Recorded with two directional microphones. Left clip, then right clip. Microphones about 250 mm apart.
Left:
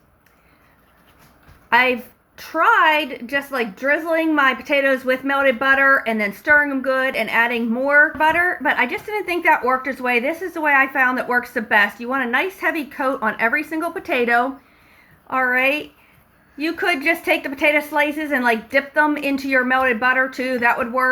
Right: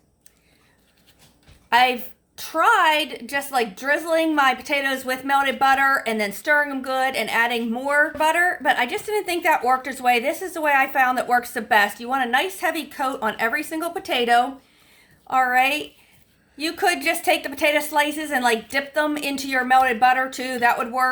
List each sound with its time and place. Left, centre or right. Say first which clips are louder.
1.7 s a woman's voice: left 1 dB; right